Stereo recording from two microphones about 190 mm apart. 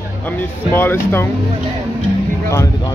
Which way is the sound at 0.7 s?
10° left (ahead or behind).